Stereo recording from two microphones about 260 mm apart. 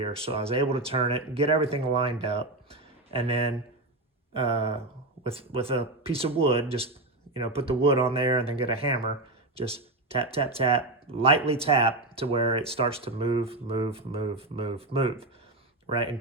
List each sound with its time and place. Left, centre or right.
0.0 s speech: right
2.2 s a sound: right
4.4 s speech: right